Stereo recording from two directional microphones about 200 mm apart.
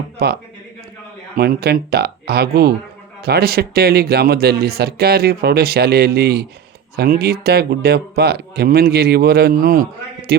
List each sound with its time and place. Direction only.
1.4 s speech: 50° right (ahead or behind)